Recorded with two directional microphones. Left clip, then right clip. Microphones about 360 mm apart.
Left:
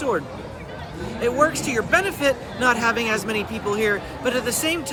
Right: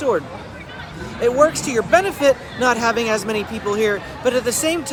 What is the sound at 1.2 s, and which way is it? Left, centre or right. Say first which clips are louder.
Speech: right 4 dB; centre.